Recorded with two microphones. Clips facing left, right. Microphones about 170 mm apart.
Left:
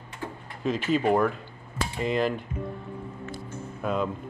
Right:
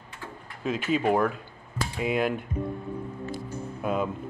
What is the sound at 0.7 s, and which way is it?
Speech, centre (ahead or behind).